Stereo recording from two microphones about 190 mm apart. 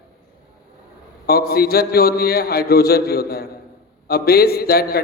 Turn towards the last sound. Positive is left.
turn(degrees=55)  # may be behind; listen again after turning